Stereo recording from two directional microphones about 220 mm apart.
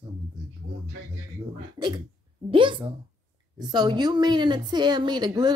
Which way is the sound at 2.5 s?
20° right (ahead or behind).